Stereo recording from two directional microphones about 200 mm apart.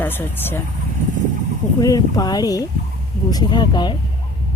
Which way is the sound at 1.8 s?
20° left (ahead or behind).